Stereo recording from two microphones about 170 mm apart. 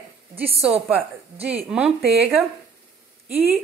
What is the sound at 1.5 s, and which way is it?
Speech, 5° right (ahead or behind).